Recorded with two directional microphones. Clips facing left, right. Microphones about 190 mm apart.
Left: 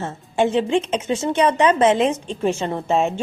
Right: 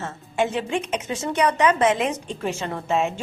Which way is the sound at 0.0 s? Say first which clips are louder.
Left 4 dB; 30° left (ahead or behind).